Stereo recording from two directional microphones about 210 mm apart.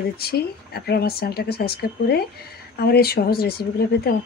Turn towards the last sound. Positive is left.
turn(degrees=50)  # may be behind; listen again after turning